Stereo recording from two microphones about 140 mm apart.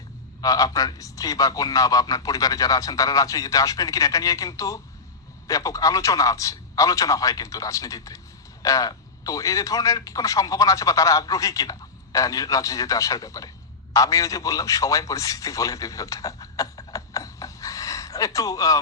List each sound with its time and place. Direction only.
0.4 s a man's voice: 25° left (ahead or behind)